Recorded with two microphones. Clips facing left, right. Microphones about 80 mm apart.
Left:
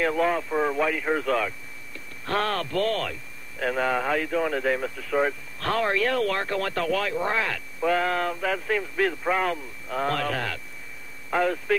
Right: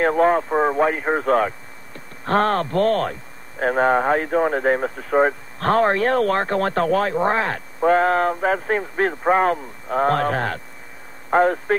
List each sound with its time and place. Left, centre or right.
0.0 s a man's voice: right